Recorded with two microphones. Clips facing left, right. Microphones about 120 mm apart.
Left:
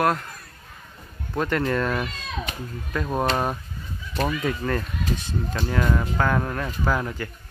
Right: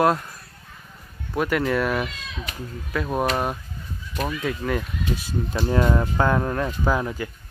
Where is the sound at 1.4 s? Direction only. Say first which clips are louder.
Right 1 dB; 10° right (ahead or behind).